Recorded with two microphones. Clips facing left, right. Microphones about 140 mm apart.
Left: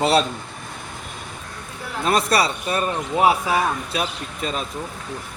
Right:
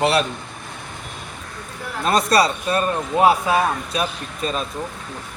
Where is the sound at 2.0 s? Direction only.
25° left (ahead or behind).